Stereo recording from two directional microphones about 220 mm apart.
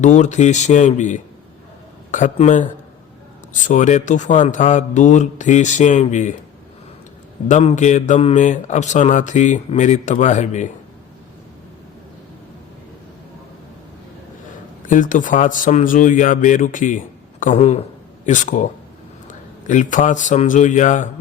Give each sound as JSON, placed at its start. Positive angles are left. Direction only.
{"t": 0.0, "sound": "speech", "side_deg": 35}
{"t": 7.4, "sound": "speech", "side_deg": 30}
{"t": 14.8, "sound": "a man's voice", "side_deg": 35}